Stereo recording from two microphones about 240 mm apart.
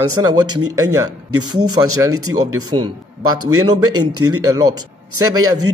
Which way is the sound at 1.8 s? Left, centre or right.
Centre.